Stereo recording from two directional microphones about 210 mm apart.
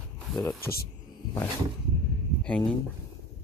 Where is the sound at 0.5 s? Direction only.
45° left (ahead or behind).